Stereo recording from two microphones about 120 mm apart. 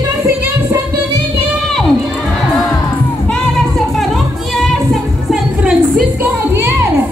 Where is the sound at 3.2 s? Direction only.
Centre (ahead or behind).